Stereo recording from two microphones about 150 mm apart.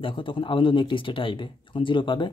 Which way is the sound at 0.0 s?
35° left (ahead or behind).